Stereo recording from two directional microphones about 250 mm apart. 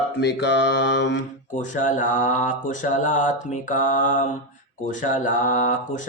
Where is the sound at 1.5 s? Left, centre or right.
Left.